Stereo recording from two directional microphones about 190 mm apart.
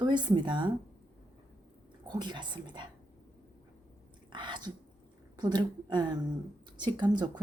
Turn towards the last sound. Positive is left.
turn(degrees=-20)  # may be behind; listen again after turning